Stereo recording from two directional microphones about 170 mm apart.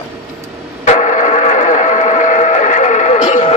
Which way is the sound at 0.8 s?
45° left (ahead or behind).